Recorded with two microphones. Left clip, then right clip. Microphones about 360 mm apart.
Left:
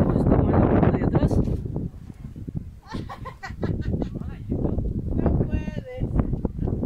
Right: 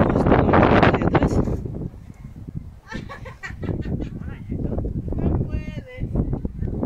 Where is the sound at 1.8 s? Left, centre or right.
Left.